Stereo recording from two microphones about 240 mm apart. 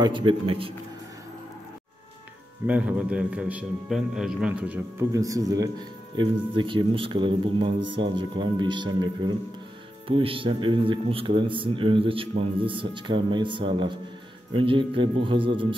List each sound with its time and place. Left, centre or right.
0.0 s a man's voice: centre
2.6 s a man's voice: centre; by 15.7 s right